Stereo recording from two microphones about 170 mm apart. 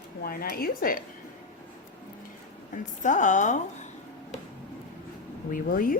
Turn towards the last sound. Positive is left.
turn(degrees=55)  # may be behind; listen again after turning